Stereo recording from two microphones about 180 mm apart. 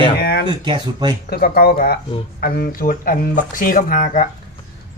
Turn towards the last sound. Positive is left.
turn(degrees=50)  # may be behind; listen again after turning